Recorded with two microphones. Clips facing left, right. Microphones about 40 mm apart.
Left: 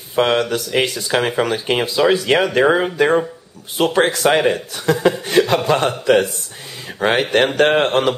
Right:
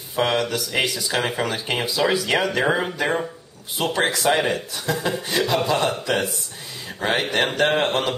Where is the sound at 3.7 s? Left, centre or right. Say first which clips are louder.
Left 6 dB; left.